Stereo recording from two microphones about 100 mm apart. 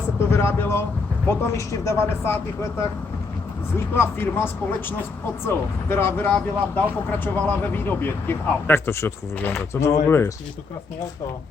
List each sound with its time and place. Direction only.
0.2 s speech: 25° left (ahead or behind)
3.9 s speech: 20° left (ahead or behind)